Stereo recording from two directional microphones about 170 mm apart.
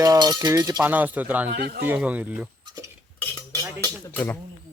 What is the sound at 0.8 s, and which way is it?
Speech, 10° right (ahead or behind).